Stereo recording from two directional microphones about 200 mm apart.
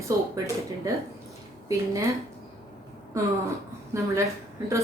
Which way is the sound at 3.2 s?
15° right (ahead or behind).